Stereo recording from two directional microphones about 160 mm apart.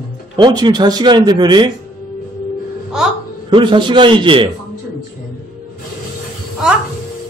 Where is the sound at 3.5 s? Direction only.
30° right (ahead or behind).